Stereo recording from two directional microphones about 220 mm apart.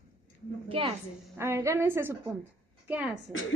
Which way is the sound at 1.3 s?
10° right (ahead or behind).